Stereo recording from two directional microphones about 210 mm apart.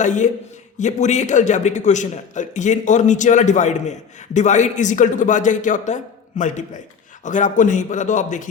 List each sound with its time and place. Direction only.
0.0 s a man's voice: 35° left (ahead or behind)